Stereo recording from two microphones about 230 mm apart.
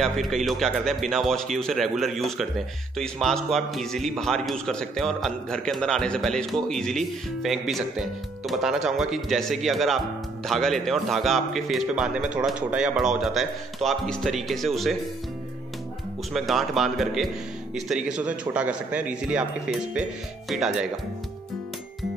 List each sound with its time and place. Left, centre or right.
0.0 s a man's voice: centre
16.3 s a man's voice: centre